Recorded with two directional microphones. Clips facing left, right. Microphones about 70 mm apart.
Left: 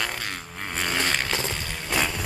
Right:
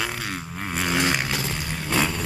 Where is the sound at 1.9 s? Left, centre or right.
Centre.